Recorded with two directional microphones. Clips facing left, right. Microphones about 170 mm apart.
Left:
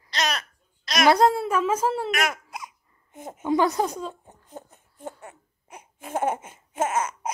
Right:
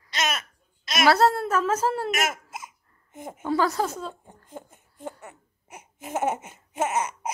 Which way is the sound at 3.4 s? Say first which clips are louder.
Left 2 dB; 20° left (ahead or behind).